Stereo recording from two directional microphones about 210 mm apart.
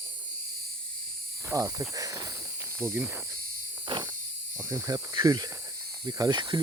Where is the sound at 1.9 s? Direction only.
15° right (ahead or behind).